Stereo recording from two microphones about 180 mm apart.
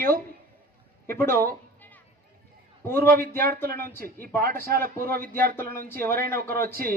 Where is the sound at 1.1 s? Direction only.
15° left (ahead or behind).